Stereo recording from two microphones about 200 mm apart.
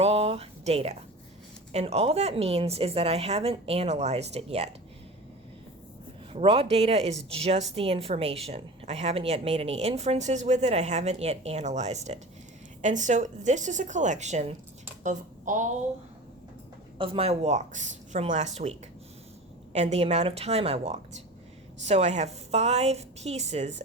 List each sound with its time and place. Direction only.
0.0 s a sound: 30° right (ahead or behind)
1.7 s a woman's voice: 30° right (ahead or behind)
6.3 s a woman's voice: 25° right (ahead or behind)
17.0 s a woman's voice: 30° right (ahead or behind)